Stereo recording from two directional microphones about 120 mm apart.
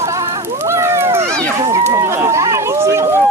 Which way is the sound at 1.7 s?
25° right (ahead or behind).